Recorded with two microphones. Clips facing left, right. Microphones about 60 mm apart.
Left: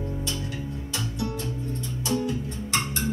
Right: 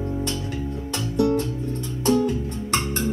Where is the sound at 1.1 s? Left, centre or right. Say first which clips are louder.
Right 14 dB; right.